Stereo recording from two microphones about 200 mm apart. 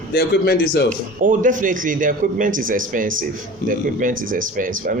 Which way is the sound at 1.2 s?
40° right (ahead or behind).